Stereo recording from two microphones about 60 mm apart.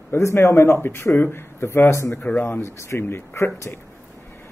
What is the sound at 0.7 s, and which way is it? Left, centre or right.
A man's voice, left.